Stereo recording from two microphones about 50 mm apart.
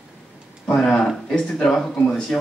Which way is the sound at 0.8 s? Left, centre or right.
Centre.